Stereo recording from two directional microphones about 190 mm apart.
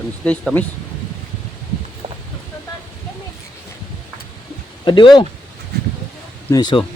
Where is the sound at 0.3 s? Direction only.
5° left (ahead or behind).